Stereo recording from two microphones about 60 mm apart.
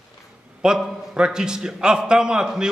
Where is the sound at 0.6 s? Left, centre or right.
Centre.